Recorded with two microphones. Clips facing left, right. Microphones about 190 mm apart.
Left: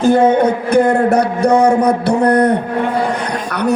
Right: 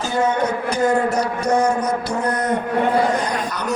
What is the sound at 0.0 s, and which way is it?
A man's voice, 55° left (ahead or behind).